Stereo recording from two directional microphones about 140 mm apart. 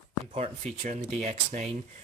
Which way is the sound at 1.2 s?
55° right (ahead or behind).